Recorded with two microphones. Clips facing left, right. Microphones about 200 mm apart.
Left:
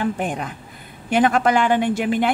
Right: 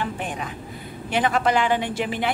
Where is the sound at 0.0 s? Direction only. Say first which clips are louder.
Left 5 dB; 50° left (ahead or behind).